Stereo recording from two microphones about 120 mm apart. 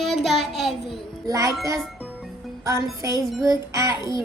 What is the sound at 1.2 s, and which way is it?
Speech, 30° right (ahead or behind).